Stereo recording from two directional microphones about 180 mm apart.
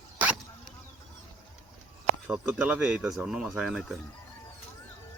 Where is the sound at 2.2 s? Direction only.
10° right (ahead or behind).